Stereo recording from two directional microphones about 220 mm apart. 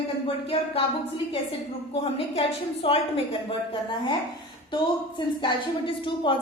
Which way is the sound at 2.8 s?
25° left (ahead or behind).